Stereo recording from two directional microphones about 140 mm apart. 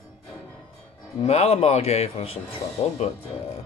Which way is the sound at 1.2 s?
50° left (ahead or behind).